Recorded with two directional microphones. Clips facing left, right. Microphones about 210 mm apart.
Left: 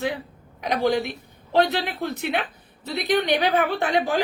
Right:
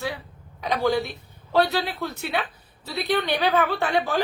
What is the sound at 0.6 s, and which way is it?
A woman's voice, 15° left (ahead or behind).